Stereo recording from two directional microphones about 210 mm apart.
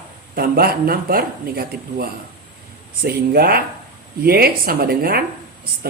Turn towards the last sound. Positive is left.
turn(degrees=-45)  # may be behind; listen again after turning